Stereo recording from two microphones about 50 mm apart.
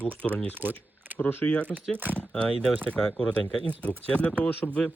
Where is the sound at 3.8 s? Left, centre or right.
Left.